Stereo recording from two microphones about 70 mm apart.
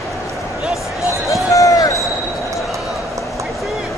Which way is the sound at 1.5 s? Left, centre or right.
Left.